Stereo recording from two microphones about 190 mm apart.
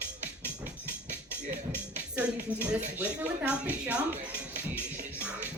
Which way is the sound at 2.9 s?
5° right (ahead or behind).